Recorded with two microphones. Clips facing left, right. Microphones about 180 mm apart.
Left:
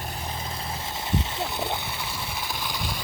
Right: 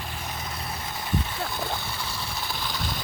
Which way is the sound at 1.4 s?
20° left (ahead or behind).